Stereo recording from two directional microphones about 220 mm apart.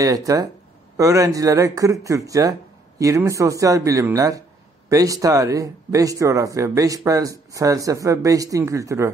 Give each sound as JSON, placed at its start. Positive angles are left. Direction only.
{"t": 0.0, "sound": "speech", "side_deg": -15}